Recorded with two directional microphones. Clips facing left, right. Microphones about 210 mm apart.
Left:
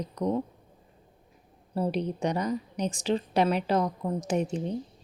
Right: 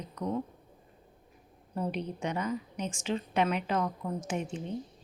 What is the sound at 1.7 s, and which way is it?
A woman's voice, 35° left (ahead or behind).